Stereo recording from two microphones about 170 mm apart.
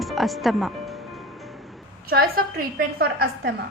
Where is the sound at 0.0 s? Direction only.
Centre (ahead or behind).